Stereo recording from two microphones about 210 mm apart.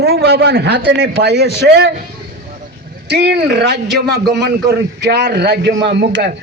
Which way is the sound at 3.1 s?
50° right (ahead or behind).